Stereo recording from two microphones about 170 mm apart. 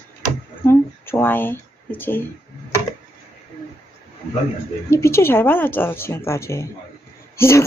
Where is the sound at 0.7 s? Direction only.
15° left (ahead or behind).